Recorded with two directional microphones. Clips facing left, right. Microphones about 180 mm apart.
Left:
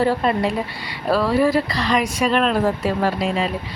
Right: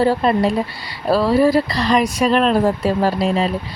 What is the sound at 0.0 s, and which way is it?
Speech, 35° right (ahead or behind).